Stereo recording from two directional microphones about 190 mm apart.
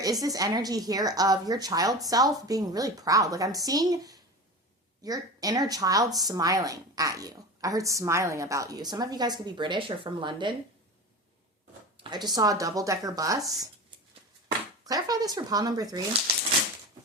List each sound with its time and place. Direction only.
0.0 s speech: 20° right (ahead or behind)
12.0 s speech: 20° right (ahead or behind)
14.8 s speech: 20° right (ahead or behind)